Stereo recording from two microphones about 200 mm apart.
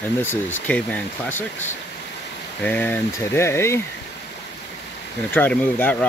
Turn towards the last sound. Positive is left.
turn(degrees=10)  # may be behind; listen again after turning